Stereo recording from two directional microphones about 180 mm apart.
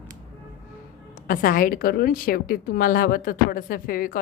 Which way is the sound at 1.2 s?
50° left (ahead or behind).